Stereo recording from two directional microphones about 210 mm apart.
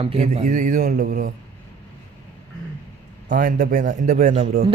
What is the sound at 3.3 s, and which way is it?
A man's voice, 35° right (ahead or behind).